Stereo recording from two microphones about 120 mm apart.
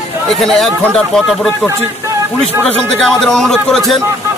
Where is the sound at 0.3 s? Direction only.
Centre (ahead or behind).